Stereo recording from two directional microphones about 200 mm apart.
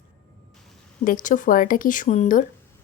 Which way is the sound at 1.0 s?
40° left (ahead or behind).